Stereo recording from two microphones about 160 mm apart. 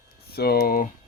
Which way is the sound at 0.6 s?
60° left (ahead or behind).